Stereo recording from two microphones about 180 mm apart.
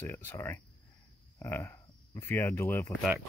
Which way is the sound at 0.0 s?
10° left (ahead or behind).